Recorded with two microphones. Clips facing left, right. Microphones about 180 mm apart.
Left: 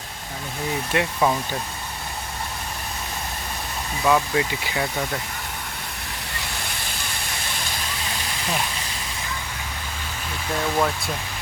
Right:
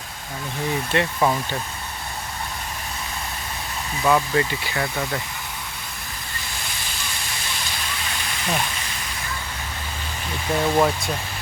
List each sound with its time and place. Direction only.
0.9 s speech: centre (ahead or behind)
4.0 s speech: centre (ahead or behind)
10.5 s speech: 10° right (ahead or behind)